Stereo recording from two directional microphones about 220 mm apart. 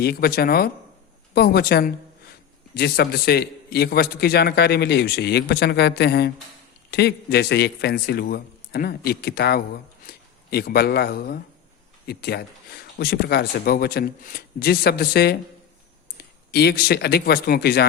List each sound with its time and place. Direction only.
0.0 s a man's voice: 45° left (ahead or behind)